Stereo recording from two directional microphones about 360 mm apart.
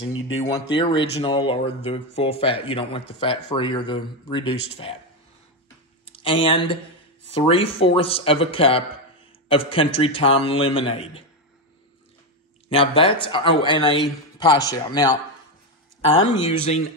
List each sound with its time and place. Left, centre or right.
0.0 s speech: centre
6.0 s a man's voice: centre
12.6 s speech: centre